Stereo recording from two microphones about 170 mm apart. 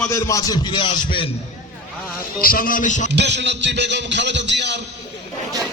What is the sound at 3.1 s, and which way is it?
Music, 90° right.